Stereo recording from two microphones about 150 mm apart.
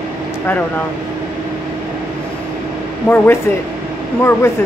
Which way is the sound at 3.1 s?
15° left (ahead or behind).